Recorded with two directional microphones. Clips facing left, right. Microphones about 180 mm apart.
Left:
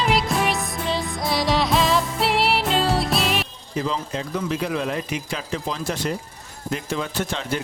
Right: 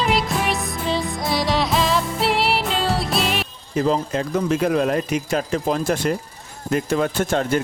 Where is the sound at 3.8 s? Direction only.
45° right (ahead or behind).